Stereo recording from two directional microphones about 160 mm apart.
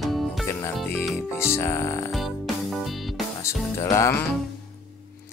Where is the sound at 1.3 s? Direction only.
15° left (ahead or behind).